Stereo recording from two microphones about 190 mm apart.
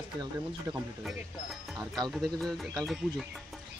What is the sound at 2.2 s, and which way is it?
A man's voice, centre (ahead or behind).